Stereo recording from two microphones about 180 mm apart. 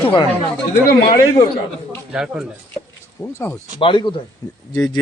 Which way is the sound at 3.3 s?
15° left (ahead or behind).